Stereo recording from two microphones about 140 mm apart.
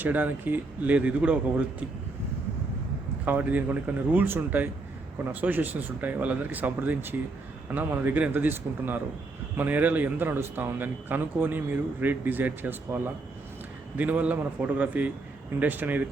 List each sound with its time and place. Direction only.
0.0 s a man's voice: 15° right (ahead or behind)
3.2 s a man's voice: 10° right (ahead or behind)